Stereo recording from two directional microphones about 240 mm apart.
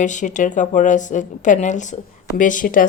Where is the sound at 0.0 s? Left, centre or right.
Left.